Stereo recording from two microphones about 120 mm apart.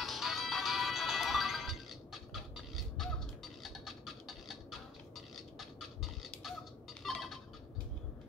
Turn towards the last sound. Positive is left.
turn(degrees=0)  # may be behind; listen again after turning